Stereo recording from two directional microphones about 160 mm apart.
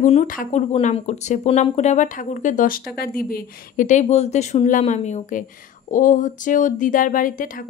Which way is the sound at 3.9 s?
45° left (ahead or behind).